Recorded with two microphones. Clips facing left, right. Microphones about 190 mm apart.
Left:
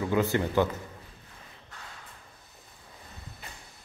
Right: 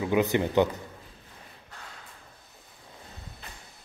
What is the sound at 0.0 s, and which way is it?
Speech, 15° right (ahead or behind).